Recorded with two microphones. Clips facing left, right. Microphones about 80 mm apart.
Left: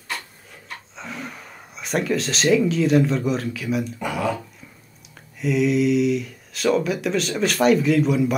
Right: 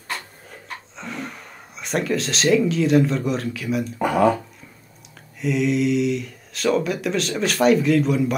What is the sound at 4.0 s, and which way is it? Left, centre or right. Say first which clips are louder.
Speech: right 7 dB; right.